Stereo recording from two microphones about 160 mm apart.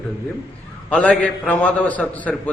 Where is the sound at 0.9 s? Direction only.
10° left (ahead or behind).